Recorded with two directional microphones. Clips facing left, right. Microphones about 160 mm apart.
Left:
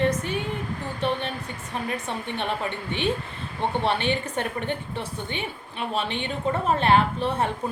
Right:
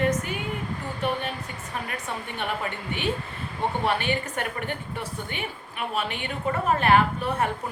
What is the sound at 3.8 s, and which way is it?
Speech, 25° left (ahead or behind).